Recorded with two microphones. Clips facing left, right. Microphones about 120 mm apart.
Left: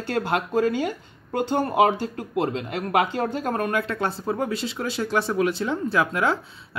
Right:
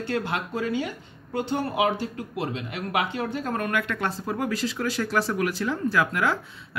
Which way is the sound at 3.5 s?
30° left (ahead or behind).